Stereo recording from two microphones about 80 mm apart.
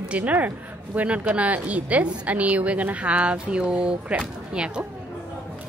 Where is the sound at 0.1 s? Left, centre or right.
Centre.